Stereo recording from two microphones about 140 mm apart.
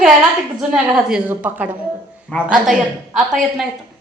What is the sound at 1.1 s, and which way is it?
Speech, 10° right (ahead or behind).